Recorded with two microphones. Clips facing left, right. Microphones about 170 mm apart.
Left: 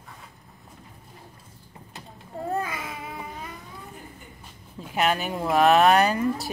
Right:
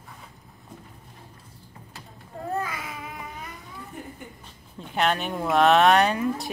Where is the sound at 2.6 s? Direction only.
25° left (ahead or behind).